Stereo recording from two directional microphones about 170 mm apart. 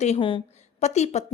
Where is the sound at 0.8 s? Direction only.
40° left (ahead or behind).